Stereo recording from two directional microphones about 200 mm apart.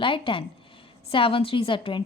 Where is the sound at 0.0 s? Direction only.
25° left (ahead or behind).